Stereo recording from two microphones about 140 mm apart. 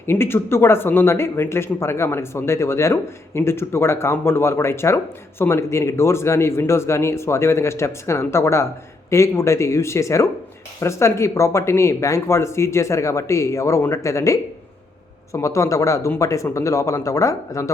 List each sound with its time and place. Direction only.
0.0 s speech: 15° left (ahead or behind)